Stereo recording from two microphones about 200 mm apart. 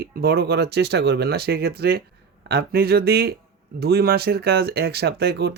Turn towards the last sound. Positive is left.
turn(degrees=-55)  # may be behind; listen again after turning